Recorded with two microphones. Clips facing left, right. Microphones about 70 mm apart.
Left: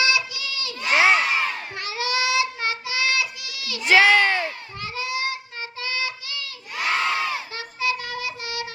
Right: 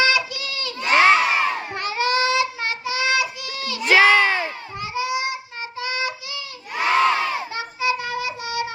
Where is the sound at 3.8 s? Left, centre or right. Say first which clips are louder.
Right 1 dB; centre.